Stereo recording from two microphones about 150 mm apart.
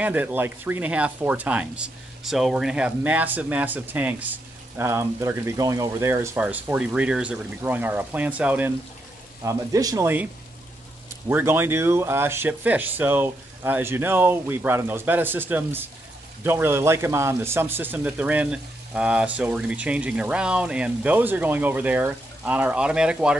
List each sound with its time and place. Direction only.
0.0 s speech: 10° right (ahead or behind)
9.4 s speech: 20° right (ahead or behind)
11.2 s speech: 15° right (ahead or behind)